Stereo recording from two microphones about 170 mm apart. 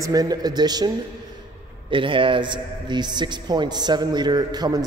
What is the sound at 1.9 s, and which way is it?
A man's voice, 30° right (ahead or behind).